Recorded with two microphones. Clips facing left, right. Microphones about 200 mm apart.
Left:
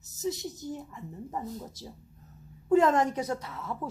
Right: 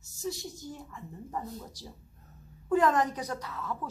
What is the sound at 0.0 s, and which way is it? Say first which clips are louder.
A woman's voice: left 4 dB; 20° left (ahead or behind).